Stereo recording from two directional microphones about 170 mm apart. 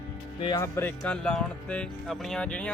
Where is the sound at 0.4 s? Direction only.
20° left (ahead or behind).